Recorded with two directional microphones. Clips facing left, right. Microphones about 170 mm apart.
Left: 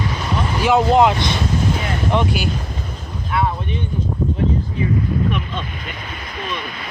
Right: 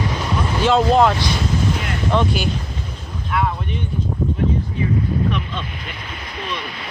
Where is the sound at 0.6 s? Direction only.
15° left (ahead or behind).